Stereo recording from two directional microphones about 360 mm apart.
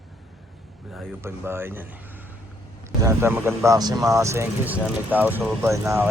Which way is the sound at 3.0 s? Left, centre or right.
Centre.